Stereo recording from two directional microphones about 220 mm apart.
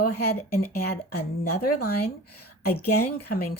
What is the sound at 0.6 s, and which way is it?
Speech, 45° left (ahead or behind).